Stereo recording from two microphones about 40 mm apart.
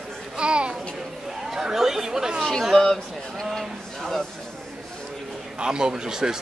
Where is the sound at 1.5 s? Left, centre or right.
Centre.